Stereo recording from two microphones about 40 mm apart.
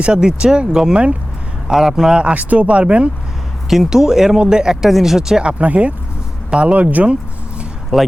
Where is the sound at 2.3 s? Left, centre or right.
Right.